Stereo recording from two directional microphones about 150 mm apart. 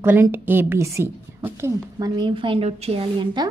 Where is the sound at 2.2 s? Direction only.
35° right (ahead or behind).